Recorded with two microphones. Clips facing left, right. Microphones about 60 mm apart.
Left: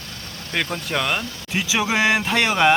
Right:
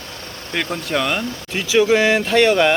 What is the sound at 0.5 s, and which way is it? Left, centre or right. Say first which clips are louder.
Speech: right 2 dB; centre.